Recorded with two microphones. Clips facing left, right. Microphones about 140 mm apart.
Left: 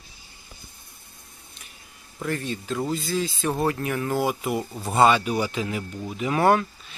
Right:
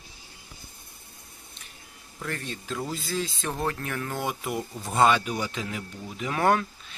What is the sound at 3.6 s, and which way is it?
Speech, 10° left (ahead or behind).